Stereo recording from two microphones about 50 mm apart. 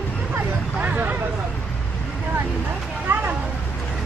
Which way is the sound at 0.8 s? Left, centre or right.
Right.